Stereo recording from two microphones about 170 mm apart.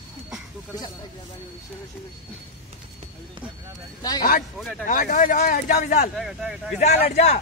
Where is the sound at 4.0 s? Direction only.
20° left (ahead or behind).